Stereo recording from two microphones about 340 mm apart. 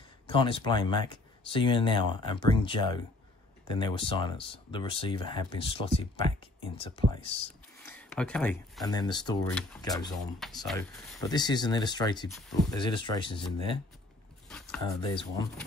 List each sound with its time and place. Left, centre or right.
0.3 s speech: centre
8.0 s speech: centre
15.0 s speech: centre